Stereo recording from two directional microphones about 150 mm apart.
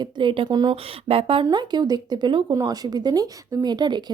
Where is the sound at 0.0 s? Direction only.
35° right (ahead or behind).